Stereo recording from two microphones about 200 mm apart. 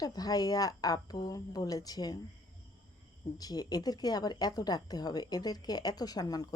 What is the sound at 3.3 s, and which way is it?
A woman's voice, 20° left (ahead or behind).